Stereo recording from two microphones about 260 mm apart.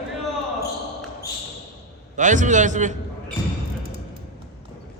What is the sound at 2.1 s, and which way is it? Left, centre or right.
Speech, right.